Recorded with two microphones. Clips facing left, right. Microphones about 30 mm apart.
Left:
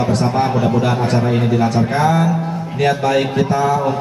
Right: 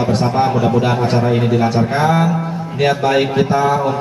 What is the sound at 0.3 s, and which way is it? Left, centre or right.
A man's voice, centre.